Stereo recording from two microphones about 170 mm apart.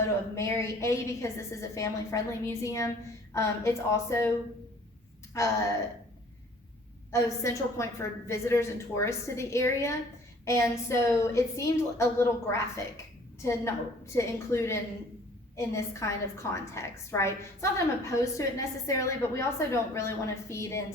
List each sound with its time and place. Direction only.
0.0 s a woman's voice: 15° left (ahead or behind)
5.3 s a woman's voice: 15° left (ahead or behind)
7.1 s a woman's voice: 20° left (ahead or behind)